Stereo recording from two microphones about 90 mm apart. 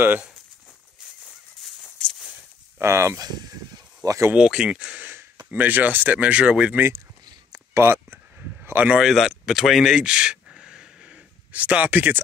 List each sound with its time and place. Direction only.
1.6 s fowl: 10° left (ahead or behind)
2.8 s speech: 30° right (ahead or behind)
4.4 s speech: 10° right (ahead or behind)
6.9 s a sound: 40° right (ahead or behind)
7.8 s speech: 25° right (ahead or behind)
8.9 s speech: centre (ahead or behind)
9.5 s a sound: centre (ahead or behind); by 12.2 s 20° right (ahead or behind)